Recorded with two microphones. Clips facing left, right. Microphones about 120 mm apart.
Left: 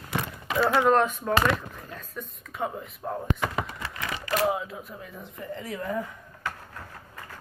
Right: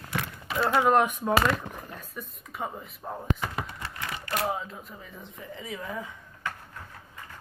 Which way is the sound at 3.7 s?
90° left.